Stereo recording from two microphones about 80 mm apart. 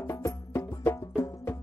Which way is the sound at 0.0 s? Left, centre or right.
Left.